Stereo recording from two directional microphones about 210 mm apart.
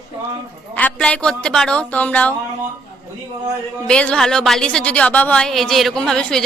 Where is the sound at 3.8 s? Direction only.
5° left (ahead or behind).